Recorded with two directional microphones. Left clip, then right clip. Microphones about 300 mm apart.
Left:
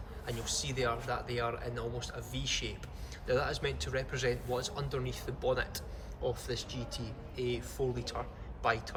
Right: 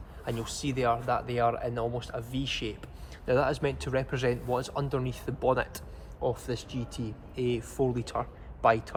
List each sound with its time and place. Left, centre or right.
0.3 s speech: centre